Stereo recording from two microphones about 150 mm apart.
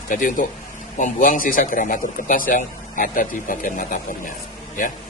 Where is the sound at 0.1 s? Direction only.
60° left (ahead or behind).